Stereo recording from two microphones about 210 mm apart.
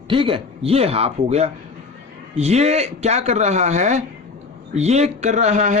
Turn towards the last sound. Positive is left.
turn(degrees=-35)  # may be behind; listen again after turning